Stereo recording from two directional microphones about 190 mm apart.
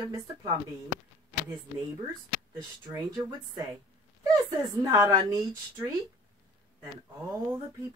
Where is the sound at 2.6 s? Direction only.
25° right (ahead or behind).